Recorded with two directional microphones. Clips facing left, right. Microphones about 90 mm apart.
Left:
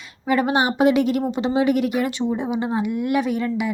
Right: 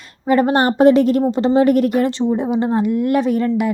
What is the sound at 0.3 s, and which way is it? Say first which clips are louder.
Speech: right 5 dB; 35° right (ahead or behind).